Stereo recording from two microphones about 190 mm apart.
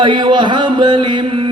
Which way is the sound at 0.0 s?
25° right (ahead or behind).